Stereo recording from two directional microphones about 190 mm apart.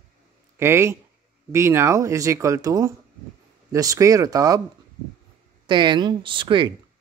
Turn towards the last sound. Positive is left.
turn(degrees=-25)  # may be behind; listen again after turning